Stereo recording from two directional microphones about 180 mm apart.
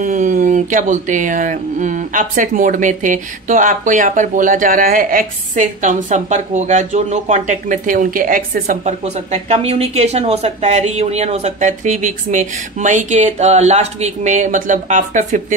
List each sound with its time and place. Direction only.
0.0 s speech: 45° right (ahead or behind)